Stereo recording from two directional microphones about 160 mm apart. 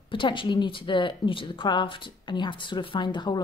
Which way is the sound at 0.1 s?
30° left (ahead or behind).